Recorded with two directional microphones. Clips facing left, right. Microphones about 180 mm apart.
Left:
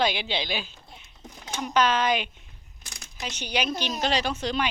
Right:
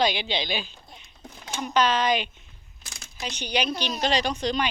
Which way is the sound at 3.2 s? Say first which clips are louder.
Right 1 dB; 10° left (ahead or behind).